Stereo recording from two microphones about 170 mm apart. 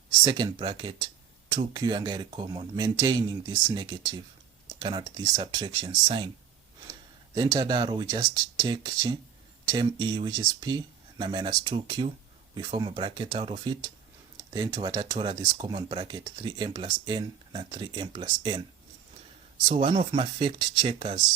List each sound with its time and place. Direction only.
0.1 s speech: 25° right (ahead or behind)
7.3 s speech: 25° right (ahead or behind)
19.6 s speech: 35° right (ahead or behind)